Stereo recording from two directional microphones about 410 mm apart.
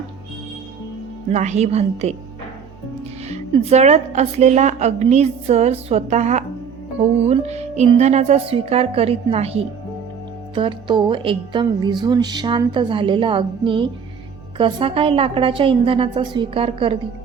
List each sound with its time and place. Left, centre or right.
1.3 s a woman's voice: centre